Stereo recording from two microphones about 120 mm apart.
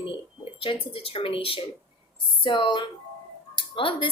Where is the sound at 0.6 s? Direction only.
50° left (ahead or behind).